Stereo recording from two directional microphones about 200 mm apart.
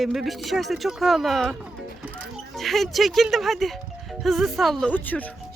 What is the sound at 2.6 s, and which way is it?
Speech, centre (ahead or behind).